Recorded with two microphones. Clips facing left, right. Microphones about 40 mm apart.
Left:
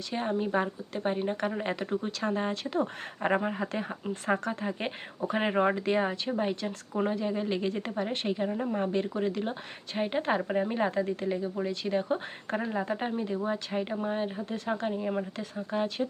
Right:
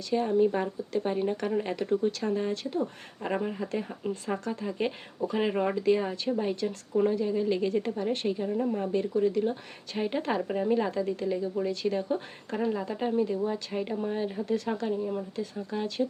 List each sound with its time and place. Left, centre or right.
0.1 s speech: left
2.6 s speech: left
3.3 s speech: left
6.7 s speech: centre
7.1 s speech: left
8.1 s speech: left
8.4 s speech: left
8.7 s speech: left
9.9 s speech: left
12.5 s speech: centre
12.8 s speech: left